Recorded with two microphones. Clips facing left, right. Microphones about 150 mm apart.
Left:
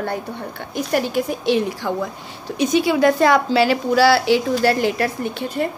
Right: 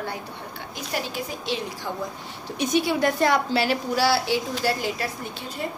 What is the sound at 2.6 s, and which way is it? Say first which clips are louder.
A woman's voice: left 6 dB; 90° left.